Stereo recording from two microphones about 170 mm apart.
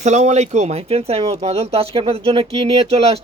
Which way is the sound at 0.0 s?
40° right (ahead or behind).